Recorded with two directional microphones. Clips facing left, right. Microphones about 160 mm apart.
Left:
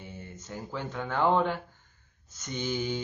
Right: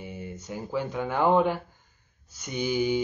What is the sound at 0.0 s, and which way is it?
Speech, 10° right (ahead or behind).